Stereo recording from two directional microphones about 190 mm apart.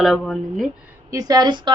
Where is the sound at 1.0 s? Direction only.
20° right (ahead or behind).